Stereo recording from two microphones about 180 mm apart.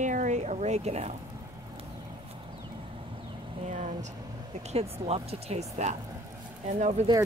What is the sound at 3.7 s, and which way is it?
Speech, 40° right (ahead or behind).